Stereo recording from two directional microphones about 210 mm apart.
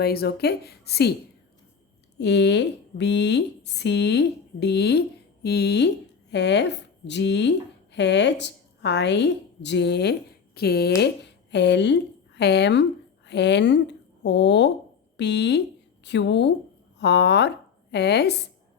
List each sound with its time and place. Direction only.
0.0 s speech: 50° left (ahead or behind)
2.1 s a woman's voice: 55° left (ahead or behind)